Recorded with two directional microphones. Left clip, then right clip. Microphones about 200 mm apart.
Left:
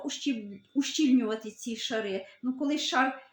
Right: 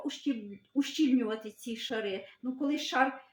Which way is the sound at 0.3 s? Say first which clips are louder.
Left 2 dB; 40° left (ahead or behind).